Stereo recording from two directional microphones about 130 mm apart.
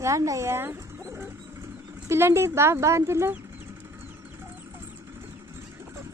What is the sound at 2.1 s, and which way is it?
Speech, 20° right (ahead or behind).